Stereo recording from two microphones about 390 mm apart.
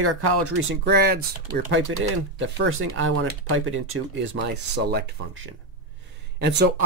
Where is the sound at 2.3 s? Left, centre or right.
Right.